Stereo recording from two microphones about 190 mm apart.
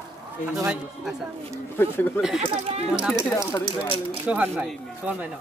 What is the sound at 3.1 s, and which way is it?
Speech, 15° left (ahead or behind).